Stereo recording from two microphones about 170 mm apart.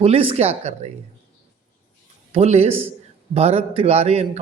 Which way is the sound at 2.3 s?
40° right (ahead or behind).